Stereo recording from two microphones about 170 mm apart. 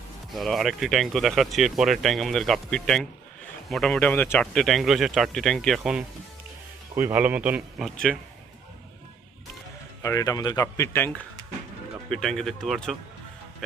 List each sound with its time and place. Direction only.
0.3 s speech: centre (ahead or behind)
10.0 s speech: 20° left (ahead or behind)
12.1 s speech: 5° left (ahead or behind)